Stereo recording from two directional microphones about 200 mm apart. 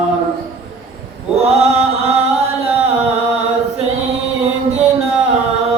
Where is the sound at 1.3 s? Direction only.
30° right (ahead or behind).